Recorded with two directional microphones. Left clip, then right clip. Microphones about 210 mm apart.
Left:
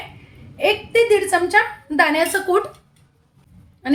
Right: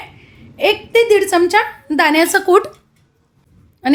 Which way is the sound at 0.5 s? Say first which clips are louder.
Right 4 dB; 50° right (ahead or behind).